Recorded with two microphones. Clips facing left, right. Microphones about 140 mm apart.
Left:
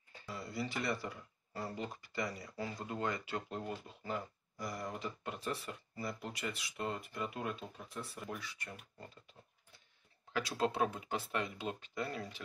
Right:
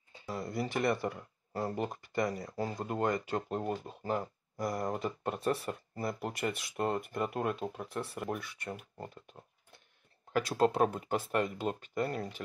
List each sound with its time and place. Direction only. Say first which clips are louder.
0.3 s speech: right 6 dB; 50° right (ahead or behind)
10.3 s speech: right 7 dB; 50° right (ahead or behind)